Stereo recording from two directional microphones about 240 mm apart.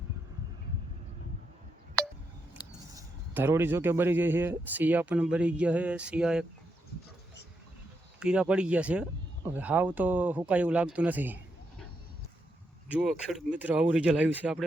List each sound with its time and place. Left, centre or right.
2.6 s a sound: centre
2.9 s speech: centre
8.2 s speech: centre
12.9 s speech: centre